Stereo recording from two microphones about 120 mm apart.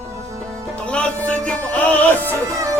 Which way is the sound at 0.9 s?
10° left (ahead or behind).